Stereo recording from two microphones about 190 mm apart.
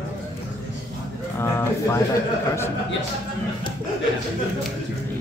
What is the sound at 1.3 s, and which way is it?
Speech, 10° left (ahead or behind).